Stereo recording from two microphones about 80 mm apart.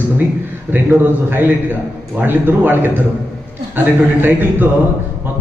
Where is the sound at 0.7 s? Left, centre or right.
Right.